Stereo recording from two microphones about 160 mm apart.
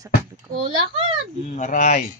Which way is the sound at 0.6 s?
30° right (ahead or behind).